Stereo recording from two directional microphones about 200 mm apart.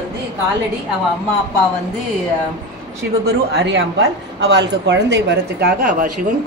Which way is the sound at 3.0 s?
55° right (ahead or behind).